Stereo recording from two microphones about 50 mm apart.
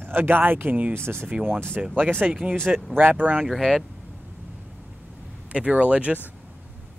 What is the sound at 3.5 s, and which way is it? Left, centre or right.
Speech, centre.